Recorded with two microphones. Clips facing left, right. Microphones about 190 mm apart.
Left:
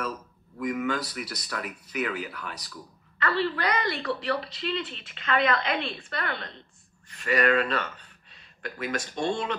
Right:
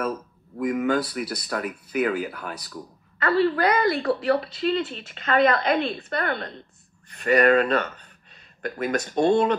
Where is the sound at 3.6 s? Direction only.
55° right (ahead or behind).